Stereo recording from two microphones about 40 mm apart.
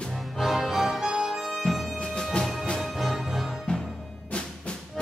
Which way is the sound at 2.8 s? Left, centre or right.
Centre.